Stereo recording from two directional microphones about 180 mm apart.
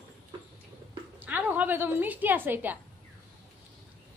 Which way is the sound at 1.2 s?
10° right (ahead or behind).